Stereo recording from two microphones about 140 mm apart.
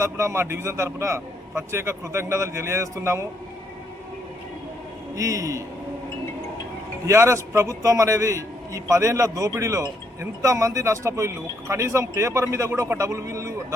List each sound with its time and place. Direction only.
0.0 s a man's voice: 20° right (ahead or behind)
5.1 s a man's voice: 25° right (ahead or behind)
7.1 s a man's voice: 20° right (ahead or behind)